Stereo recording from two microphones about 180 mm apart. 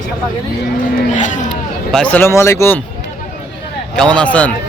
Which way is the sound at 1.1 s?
45° left (ahead or behind).